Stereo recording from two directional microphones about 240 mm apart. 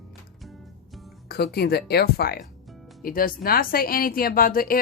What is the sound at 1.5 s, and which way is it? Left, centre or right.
Speech, left.